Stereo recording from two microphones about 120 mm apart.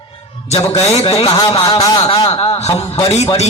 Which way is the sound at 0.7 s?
60° left (ahead or behind).